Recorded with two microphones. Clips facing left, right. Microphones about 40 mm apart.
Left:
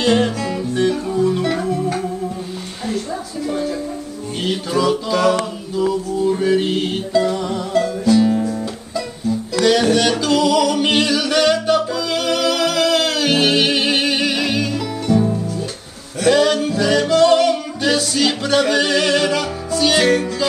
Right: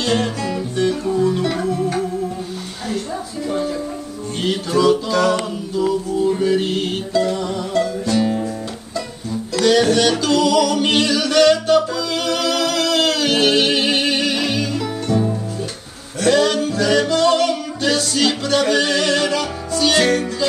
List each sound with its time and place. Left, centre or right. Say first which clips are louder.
0.0 s music: left 3 dB; centre
3.4 s music: even; centre
9.6 s singing: right 1 dB; centre
12.1 s music: left 2 dB; centre
16.2 s singing: left 1 dB; centre